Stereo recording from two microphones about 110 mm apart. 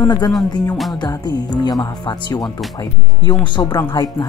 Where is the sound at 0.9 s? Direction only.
40° left (ahead or behind).